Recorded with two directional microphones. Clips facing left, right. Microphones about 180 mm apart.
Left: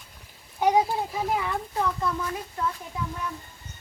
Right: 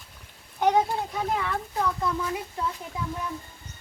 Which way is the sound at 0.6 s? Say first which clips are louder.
Left 1 dB; 5° left (ahead or behind).